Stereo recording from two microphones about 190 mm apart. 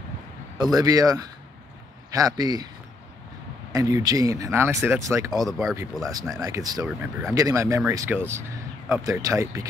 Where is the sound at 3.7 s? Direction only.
20° right (ahead or behind).